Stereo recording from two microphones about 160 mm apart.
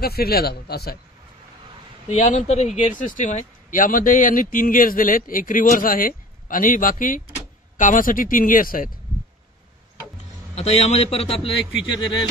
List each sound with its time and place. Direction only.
0.0 s a man's voice: 75° left (ahead or behind)
2.0 s speech: 50° left (ahead or behind)
10.5 s a man's voice: 40° left (ahead or behind)